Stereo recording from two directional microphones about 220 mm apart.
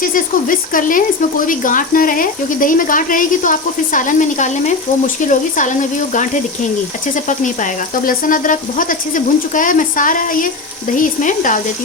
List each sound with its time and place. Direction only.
0.0 s speech: 40° left (ahead or behind)
7.3 s speech: 35° left (ahead or behind)